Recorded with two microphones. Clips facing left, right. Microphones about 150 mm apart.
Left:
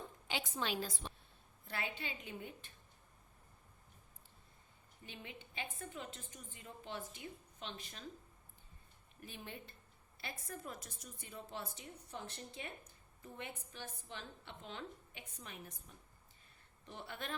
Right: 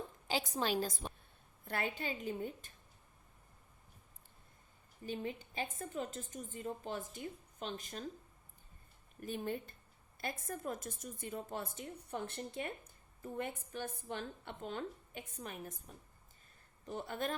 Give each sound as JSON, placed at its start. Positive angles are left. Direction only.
{"t": 0.3, "sound": "a woman's voice", "side_deg": -40}
{"t": 5.0, "sound": "a woman's voice", "side_deg": -40}
{"t": 9.2, "sound": "a woman's voice", "side_deg": -45}